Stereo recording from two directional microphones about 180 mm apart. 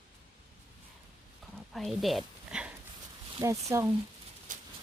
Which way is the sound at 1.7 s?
Centre (ahead or behind).